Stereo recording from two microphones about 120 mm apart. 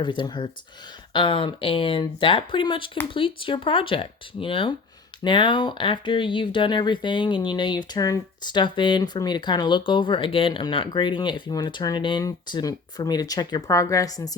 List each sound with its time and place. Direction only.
0.0 s speech: 40° left (ahead or behind)